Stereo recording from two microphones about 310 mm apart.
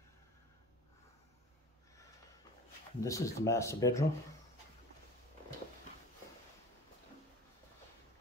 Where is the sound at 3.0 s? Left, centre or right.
Centre.